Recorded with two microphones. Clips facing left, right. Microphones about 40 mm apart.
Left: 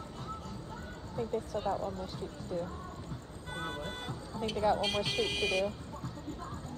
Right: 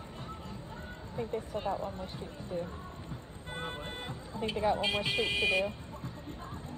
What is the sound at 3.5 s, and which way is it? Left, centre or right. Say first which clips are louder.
Music: left 1 dB; centre.